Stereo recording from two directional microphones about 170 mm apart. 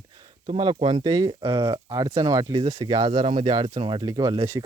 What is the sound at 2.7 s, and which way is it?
Speech, 35° right (ahead or behind).